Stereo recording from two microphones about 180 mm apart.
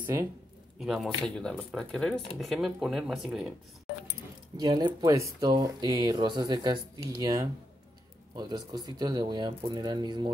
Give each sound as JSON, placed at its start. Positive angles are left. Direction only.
{"t": 0.0, "sound": "speech", "side_deg": -15}
{"t": 0.7, "sound": "speech", "side_deg": 0}
{"t": 4.6, "sound": "speech", "side_deg": -20}